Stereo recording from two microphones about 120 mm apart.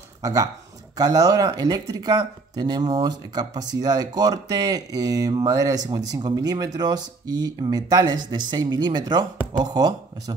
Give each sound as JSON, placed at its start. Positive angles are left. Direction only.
{"t": 0.2, "sound": "speech", "side_deg": -30}